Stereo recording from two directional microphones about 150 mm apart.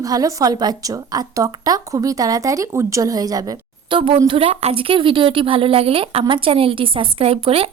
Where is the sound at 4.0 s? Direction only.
35° right (ahead or behind).